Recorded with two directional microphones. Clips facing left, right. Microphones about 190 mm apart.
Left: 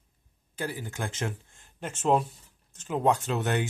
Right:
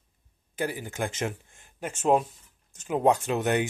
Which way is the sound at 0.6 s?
15° right (ahead or behind).